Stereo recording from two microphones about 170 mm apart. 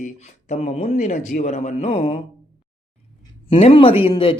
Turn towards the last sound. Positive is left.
turn(degrees=30)  # may be behind; listen again after turning